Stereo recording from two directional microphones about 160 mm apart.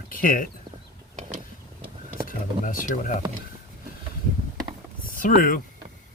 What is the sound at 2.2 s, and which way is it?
Speech, 60° left (ahead or behind).